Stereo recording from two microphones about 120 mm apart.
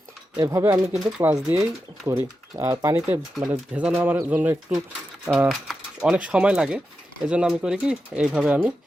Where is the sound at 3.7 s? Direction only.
10° right (ahead or behind).